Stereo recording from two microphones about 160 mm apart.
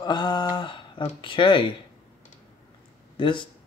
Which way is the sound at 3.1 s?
30° left (ahead or behind).